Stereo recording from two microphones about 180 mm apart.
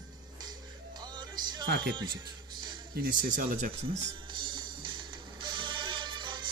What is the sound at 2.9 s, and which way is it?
Speech, 55° right (ahead or behind).